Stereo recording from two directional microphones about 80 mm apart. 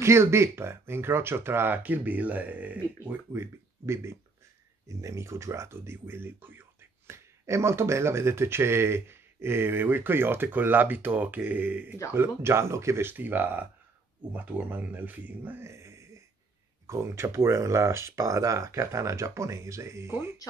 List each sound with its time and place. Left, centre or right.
0.0 s speech: right; by 3.2 s centre
3.3 s speech: right
12.2 s speech: right
15.6 s a sound: right
16.8 s speech: right